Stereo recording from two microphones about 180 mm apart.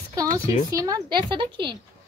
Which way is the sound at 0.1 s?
20° right (ahead or behind).